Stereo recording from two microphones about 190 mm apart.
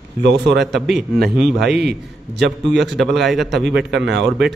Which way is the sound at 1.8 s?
65° right (ahead or behind).